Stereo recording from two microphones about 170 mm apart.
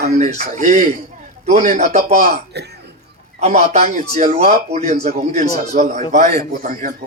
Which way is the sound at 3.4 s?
40° right (ahead or behind).